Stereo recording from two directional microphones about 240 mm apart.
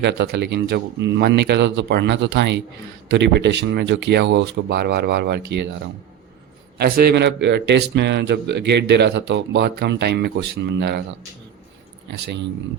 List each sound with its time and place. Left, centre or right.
0.0 s a man's voice: right
6.7 s a man's voice: right
12.1 s a man's voice: right